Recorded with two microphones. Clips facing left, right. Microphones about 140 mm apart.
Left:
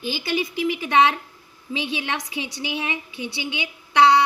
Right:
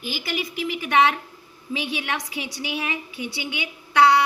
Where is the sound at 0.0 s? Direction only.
25° left (ahead or behind).